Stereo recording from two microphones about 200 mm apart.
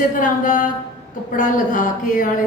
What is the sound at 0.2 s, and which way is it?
Speech, 40° left (ahead or behind).